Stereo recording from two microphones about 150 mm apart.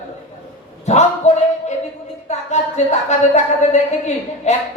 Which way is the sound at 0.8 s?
50° left (ahead or behind).